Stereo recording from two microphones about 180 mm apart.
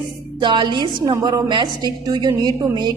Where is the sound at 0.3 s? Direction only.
25° right (ahead or behind).